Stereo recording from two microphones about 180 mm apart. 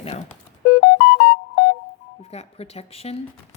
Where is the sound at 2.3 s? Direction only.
35° left (ahead or behind).